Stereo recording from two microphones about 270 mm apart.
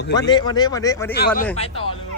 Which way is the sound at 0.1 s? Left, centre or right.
Centre.